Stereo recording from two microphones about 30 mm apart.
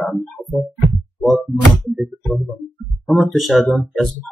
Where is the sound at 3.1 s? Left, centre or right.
Centre.